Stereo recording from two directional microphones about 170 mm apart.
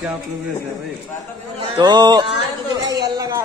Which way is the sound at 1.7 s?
25° right (ahead or behind).